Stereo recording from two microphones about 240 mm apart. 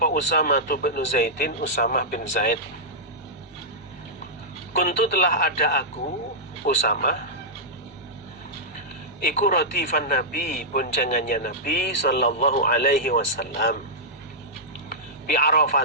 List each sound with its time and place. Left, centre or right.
0.0 s a man's voice: left
4.8 s a man's voice: left
6.8 s a man's voice: left
9.2 s a man's voice: left
14.8 s vehicle: left